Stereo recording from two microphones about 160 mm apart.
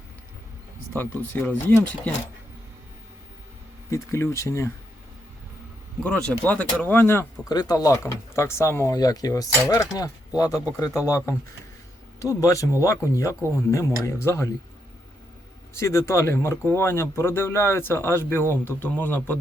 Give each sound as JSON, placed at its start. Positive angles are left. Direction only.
{"t": 0.9, "sound": "speech", "side_deg": 10}
{"t": 3.8, "sound": "speech", "side_deg": 15}
{"t": 6.0, "sound": "speech", "side_deg": 5}
{"t": 12.2, "sound": "speech", "side_deg": 20}
{"t": 15.7, "sound": "speech", "side_deg": 15}